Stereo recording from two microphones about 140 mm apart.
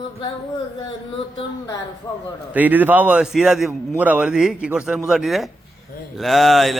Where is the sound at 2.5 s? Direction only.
10° right (ahead or behind).